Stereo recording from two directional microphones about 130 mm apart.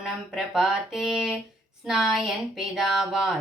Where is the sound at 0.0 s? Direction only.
5° right (ahead or behind).